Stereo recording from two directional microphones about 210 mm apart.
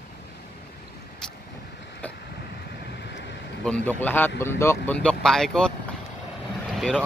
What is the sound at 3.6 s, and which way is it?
A man's voice, 5° left (ahead or behind).